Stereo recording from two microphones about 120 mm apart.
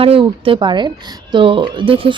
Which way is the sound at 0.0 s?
50° right (ahead or behind).